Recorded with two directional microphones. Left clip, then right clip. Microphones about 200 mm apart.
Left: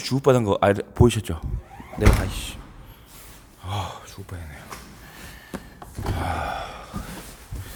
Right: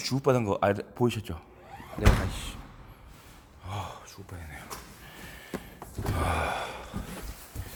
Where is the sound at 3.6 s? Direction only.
30° left (ahead or behind).